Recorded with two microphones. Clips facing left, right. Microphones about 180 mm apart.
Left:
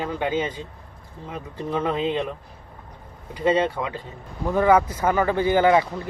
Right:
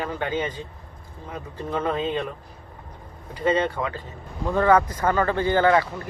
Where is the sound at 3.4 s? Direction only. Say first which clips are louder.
Left 2 dB; 10° left (ahead or behind).